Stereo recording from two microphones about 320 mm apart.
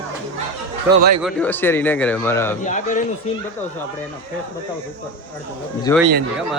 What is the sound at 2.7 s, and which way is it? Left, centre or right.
Speech, left.